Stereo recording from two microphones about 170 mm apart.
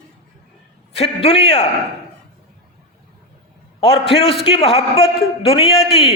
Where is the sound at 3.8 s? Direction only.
35° left (ahead or behind).